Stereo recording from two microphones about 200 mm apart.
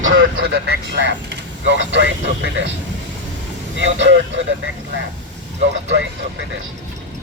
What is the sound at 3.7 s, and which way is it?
Speech, 65° right (ahead or behind).